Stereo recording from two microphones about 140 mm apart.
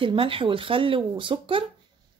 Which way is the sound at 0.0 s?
40° right (ahead or behind).